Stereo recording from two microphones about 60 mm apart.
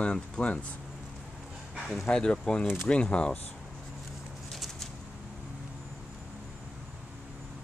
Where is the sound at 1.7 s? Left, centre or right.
Centre.